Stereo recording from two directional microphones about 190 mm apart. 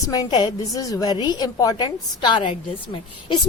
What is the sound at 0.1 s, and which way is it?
A woman's voice, 20° left (ahead or behind).